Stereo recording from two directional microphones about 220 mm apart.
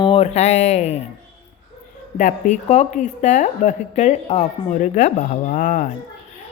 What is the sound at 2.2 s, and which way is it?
A woman's voice, 35° left (ahead or behind).